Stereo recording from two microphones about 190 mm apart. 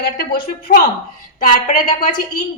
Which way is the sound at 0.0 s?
55° left (ahead or behind).